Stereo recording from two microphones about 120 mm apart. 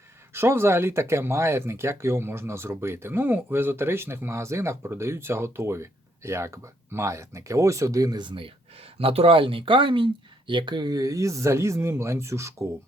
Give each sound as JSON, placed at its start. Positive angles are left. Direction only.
{"t": 0.3, "sound": "speech", "side_deg": -20}